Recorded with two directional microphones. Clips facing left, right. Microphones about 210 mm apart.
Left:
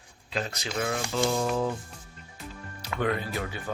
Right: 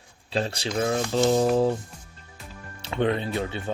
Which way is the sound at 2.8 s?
25° right (ahead or behind).